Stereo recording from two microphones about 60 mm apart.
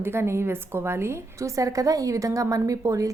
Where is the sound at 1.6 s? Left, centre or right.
Right.